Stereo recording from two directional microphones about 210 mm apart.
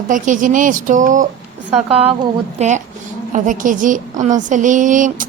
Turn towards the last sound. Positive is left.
turn(degrees=-40)  # may be behind; listen again after turning